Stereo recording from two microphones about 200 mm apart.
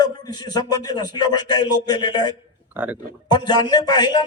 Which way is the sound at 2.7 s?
10° right (ahead or behind).